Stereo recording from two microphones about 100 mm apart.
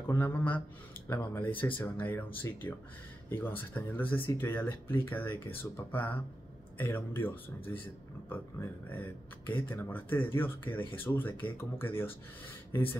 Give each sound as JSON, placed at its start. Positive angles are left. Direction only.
{"t": 0.1, "sound": "speech", "side_deg": 20}